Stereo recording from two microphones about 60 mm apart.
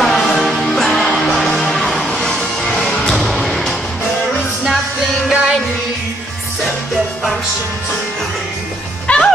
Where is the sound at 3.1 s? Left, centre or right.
Centre.